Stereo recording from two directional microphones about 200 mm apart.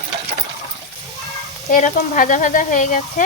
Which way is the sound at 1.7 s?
45° left (ahead or behind).